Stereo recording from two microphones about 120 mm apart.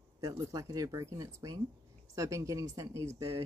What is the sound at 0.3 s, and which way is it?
A woman's voice, 25° right (ahead or behind).